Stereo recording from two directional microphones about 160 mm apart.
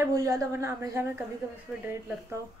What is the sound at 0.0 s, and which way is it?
Speech, 20° right (ahead or behind).